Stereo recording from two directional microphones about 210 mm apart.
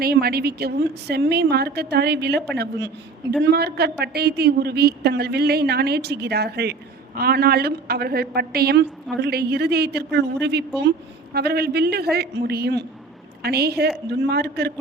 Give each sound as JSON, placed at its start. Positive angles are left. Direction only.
{"t": 0.0, "sound": "a woman's voice", "side_deg": -45}